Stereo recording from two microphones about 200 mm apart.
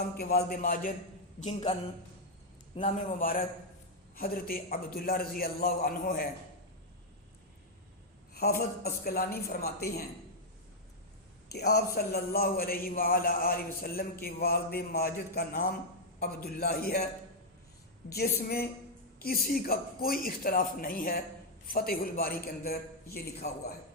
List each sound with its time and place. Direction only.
0.2 s a man's voice: 50° left (ahead or behind)
1.4 s speech: 30° left (ahead or behind)
2.8 s a man's voice: 40° left (ahead or behind)
8.3 s a man's voice: 50° left (ahead or behind)
11.5 s a man's voice: 50° left (ahead or behind)
18.1 s a man's voice: 50° left (ahead or behind)